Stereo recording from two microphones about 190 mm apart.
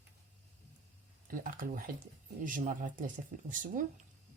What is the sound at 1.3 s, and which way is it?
Speech, 45° right (ahead or behind).